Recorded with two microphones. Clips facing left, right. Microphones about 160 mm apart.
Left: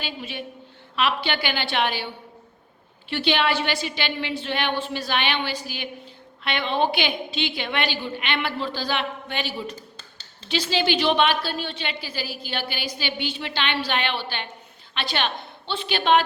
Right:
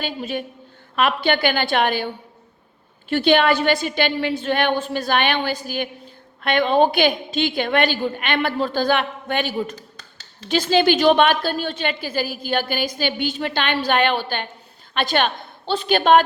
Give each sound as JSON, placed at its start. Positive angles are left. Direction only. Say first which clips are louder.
{"t": 0.0, "sound": "a woman's voice", "louder": "right 7 dB", "side_deg": -45}
{"t": 3.1, "sound": "a woman's voice", "louder": "right 6 dB", "side_deg": -50}
{"t": 10.0, "sound": "a sound", "louder": "right 5 dB", "side_deg": 25}
{"t": 10.5, "sound": "a woman's voice", "louder": "right 6 dB", "side_deg": -50}